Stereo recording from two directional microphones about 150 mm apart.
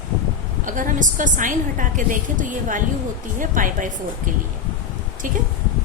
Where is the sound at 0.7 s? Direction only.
60° right (ahead or behind).